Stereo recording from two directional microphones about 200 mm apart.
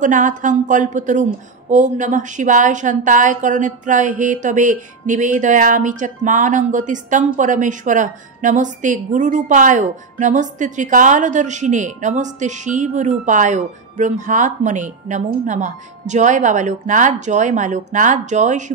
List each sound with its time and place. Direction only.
0.0 s a woman's voice: 40° right (ahead or behind)